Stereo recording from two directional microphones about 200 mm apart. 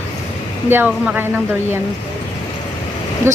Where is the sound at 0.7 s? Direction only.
10° right (ahead or behind).